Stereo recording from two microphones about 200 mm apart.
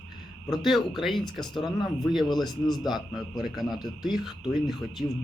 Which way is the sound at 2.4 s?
20° left (ahead or behind).